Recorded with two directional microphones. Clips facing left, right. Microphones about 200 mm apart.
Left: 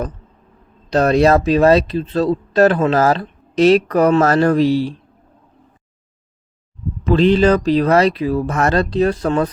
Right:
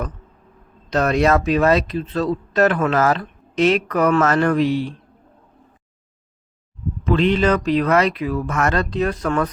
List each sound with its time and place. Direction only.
0.9 s speech: 30° left (ahead or behind)
7.1 s speech: 35° left (ahead or behind)